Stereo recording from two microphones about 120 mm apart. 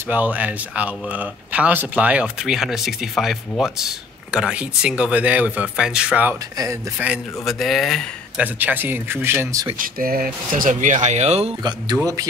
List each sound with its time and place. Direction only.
0.1 s speech: 15° right (ahead or behind)
7.4 s speech: centre (ahead or behind)
8.4 s speech: 15° right (ahead or behind)
10.7 s speech: 90° right; by 11.5 s 60° right (ahead or behind)
11.6 s speech: 30° right (ahead or behind)